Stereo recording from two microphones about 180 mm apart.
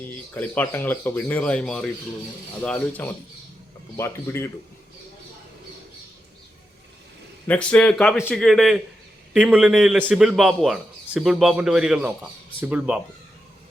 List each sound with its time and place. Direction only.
0.0 s speech: 10° left (ahead or behind)
7.4 s speech: 5° left (ahead or behind)